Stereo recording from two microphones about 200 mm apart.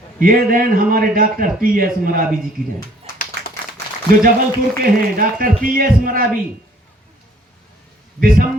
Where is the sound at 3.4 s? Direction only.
60° right (ahead or behind).